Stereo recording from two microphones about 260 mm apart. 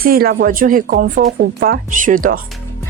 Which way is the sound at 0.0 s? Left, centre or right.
Right.